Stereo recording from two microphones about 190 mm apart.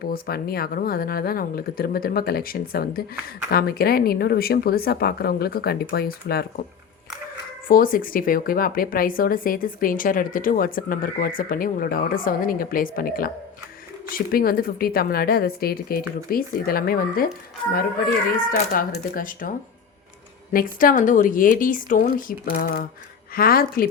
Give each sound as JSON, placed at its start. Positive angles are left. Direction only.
{"t": 0.1, "sound": "speech", "side_deg": 50}
{"t": 7.7, "sound": "speech", "side_deg": 50}
{"t": 18.3, "sound": "speech", "side_deg": 50}
{"t": 20.5, "sound": "speech", "side_deg": 45}